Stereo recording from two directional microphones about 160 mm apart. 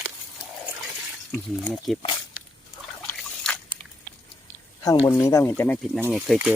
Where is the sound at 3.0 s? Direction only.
5° left (ahead or behind).